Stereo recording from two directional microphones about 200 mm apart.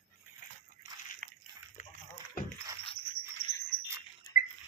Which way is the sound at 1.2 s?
40° right (ahead or behind).